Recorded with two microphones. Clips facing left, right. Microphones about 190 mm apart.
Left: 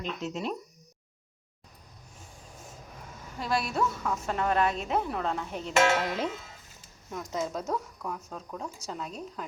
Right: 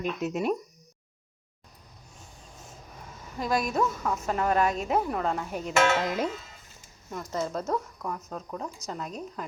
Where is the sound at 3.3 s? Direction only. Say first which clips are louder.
Right 3 dB; 40° right (ahead or behind).